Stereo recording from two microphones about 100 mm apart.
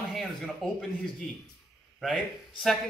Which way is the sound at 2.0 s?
Centre (ahead or behind).